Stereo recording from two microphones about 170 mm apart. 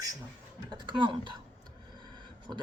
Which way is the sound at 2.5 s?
20° right (ahead or behind).